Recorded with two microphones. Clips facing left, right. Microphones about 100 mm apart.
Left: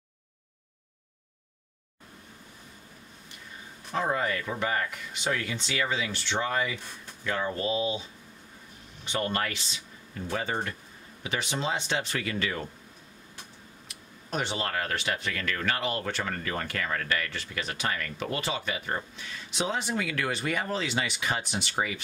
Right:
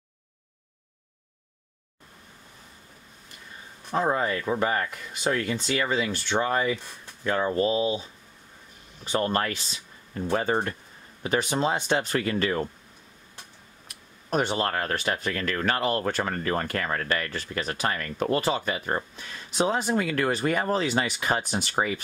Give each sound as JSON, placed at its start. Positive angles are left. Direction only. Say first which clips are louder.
{"t": 3.9, "sound": "speech", "louder": "right 3 dB", "side_deg": -35}
{"t": 9.0, "sound": "speech", "louder": "right 4 dB", "side_deg": -40}
{"t": 13.8, "sound": "speech", "louder": "right 8 dB", "side_deg": -45}